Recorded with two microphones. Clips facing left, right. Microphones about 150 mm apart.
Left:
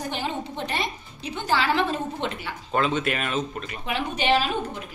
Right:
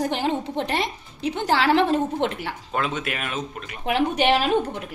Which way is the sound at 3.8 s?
65° right (ahead or behind).